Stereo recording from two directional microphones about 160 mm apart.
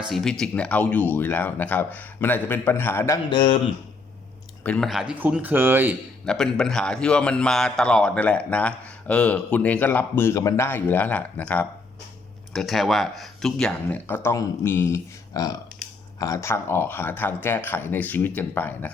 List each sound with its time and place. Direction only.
0.1 s a man's voice: 5° left (ahead or behind)
3.2 s a man's voice: 30° left (ahead or behind)
4.6 s speech: 5° left (ahead or behind); by 5.9 s 10° right (ahead or behind)
6.2 s a man's voice: 5° left (ahead or behind)